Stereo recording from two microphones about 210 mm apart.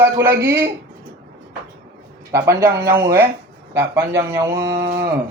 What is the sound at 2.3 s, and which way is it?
A man's voice, 15° right (ahead or behind).